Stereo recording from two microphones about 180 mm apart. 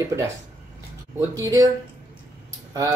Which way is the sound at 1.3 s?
20° right (ahead or behind).